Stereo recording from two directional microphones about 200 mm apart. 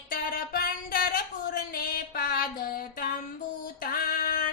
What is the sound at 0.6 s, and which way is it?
Music, 50° left (ahead or behind).